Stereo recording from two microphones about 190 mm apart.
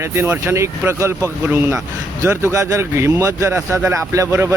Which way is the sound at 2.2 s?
15° right (ahead or behind).